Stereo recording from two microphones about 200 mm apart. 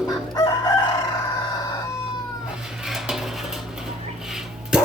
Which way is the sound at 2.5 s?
5° right (ahead or behind).